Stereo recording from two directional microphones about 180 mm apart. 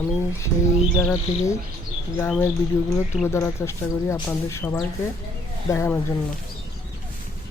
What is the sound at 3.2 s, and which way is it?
Speech, 15° left (ahead or behind).